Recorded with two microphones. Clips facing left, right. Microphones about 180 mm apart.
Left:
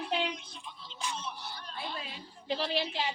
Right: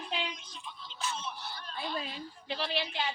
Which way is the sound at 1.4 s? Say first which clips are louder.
Even; 15° left (ahead or behind).